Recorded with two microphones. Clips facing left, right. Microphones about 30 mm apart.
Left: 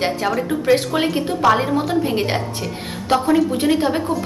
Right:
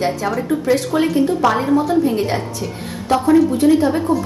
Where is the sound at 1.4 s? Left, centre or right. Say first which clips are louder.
Right 1 dB; left.